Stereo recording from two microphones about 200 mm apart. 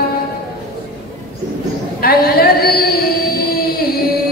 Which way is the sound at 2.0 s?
50° left (ahead or behind).